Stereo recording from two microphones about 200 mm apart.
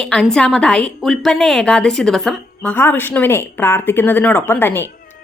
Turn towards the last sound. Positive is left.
turn(degrees=10)  # may be behind; listen again after turning